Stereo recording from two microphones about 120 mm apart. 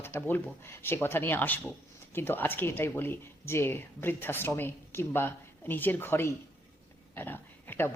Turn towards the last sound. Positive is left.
turn(degrees=20)  # may be behind; listen again after turning